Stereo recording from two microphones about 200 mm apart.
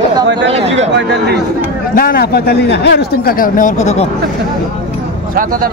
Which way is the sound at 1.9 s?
45° left (ahead or behind).